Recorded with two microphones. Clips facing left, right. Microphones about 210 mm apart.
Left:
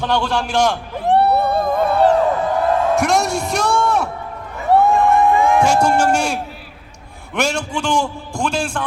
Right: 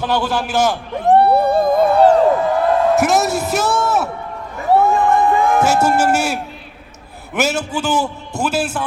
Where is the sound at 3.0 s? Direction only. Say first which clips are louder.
Right 2 dB; 5° right (ahead or behind).